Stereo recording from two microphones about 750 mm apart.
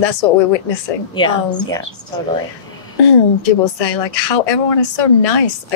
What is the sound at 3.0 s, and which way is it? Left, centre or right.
A woman's voice, left.